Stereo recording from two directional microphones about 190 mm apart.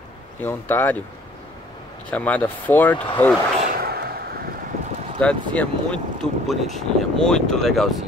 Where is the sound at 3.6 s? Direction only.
50° right (ahead or behind).